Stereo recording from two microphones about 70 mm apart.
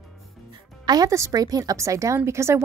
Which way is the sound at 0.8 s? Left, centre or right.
Right.